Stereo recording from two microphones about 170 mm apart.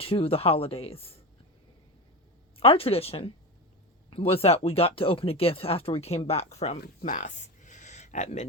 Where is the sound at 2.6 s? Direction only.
35° left (ahead or behind).